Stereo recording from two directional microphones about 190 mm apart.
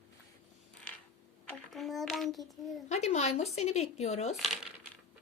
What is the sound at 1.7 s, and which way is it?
A child's voice, centre (ahead or behind).